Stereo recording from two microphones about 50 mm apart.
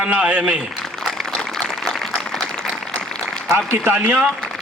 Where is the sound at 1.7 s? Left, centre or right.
Centre.